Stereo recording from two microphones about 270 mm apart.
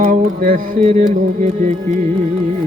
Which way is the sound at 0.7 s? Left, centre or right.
Right.